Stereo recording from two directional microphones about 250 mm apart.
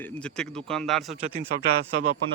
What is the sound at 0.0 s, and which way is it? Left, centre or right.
Speech, centre.